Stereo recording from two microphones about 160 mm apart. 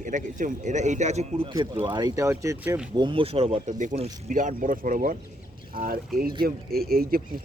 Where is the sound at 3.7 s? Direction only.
50° right (ahead or behind); by 7.2 s 70° right (ahead or behind).